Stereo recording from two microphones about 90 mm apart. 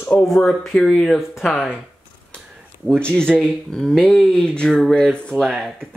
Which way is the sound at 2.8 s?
10° left (ahead or behind).